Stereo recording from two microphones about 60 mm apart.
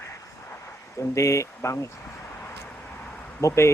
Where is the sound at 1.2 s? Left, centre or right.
Left.